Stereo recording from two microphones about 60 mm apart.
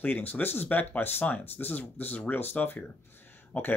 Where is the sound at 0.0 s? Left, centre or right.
Left.